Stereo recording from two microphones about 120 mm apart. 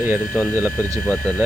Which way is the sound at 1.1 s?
10° left (ahead or behind).